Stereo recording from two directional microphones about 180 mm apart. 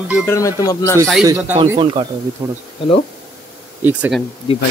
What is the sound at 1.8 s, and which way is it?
Speech, 25° right (ahead or behind).